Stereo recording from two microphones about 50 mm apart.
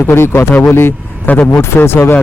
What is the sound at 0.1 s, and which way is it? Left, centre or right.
Speech, left.